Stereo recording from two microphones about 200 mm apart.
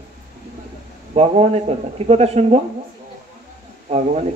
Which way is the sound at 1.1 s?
30° right (ahead or behind).